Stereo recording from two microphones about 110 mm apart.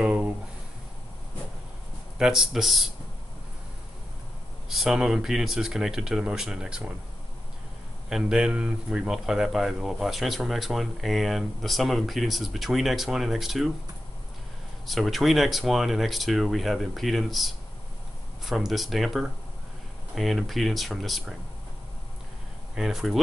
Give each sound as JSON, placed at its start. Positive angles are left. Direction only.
{"t": 0.0, "sound": "a sound", "side_deg": -10}
{"t": 2.1, "sound": "speech", "side_deg": -5}
{"t": 4.6, "sound": "speech", "side_deg": -5}
{"t": 8.1, "sound": "speech", "side_deg": -5}
{"t": 14.9, "sound": "speech", "side_deg": 0}
{"t": 22.8, "sound": "speech", "side_deg": -5}